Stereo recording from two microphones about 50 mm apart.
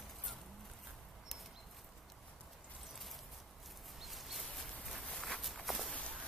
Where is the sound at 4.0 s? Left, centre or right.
Centre.